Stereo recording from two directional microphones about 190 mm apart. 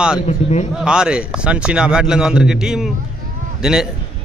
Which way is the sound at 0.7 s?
5° right (ahead or behind).